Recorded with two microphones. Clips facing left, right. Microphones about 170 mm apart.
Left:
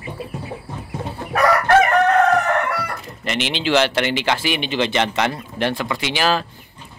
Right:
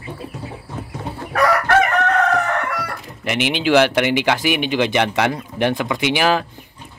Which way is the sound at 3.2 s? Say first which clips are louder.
Right 3 dB; 15° right (ahead or behind).